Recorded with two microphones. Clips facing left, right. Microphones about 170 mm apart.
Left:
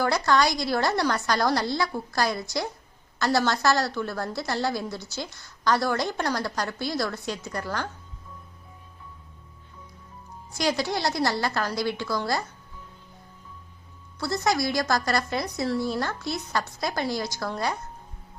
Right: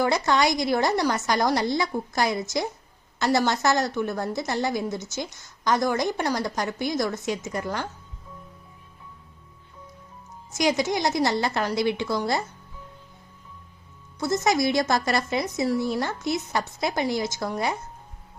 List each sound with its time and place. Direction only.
0.0 s a woman's voice: 20° right (ahead or behind)
10.6 s a woman's voice: 20° right (ahead or behind)
14.2 s a woman's voice: 20° right (ahead or behind)